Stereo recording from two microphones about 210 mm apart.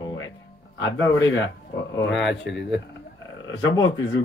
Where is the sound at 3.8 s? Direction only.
65° left (ahead or behind).